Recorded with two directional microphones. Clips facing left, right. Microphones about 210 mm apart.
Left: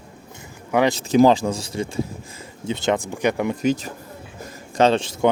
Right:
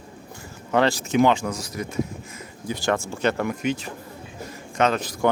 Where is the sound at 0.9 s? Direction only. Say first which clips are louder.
Left 4 dB; 35° left (ahead or behind); by 3.5 s 15° left (ahead or behind).